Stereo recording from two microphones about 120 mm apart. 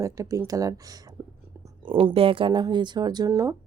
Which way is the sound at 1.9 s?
45° right (ahead or behind).